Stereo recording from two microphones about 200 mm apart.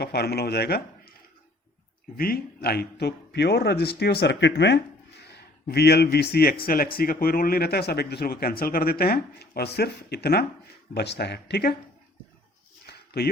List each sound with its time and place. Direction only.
0.0 s speech: 55° left (ahead or behind)
2.1 s a man's voice: 50° left (ahead or behind)
13.2 s a man's voice: 50° left (ahead or behind)